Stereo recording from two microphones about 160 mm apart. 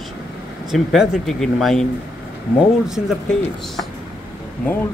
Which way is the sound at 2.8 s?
5° right (ahead or behind).